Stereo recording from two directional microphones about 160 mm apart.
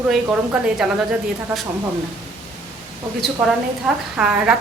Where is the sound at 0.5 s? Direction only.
5° right (ahead or behind).